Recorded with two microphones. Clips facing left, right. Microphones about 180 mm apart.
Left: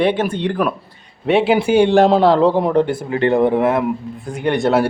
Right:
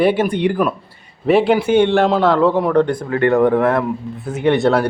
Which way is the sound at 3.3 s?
10° left (ahead or behind).